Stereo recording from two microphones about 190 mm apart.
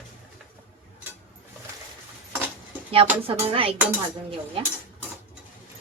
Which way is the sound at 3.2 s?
30° right (ahead or behind).